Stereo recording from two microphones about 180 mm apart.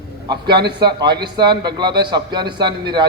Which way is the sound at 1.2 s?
25° right (ahead or behind).